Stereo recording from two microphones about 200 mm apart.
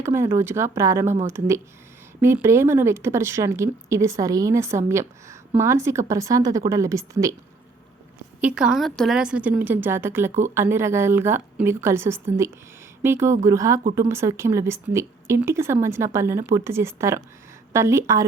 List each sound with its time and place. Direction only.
0.0 s a woman's voice: 15° right (ahead or behind)
8.4 s a woman's voice: 5° right (ahead or behind)